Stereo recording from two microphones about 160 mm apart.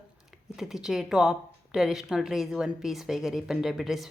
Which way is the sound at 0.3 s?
5° right (ahead or behind).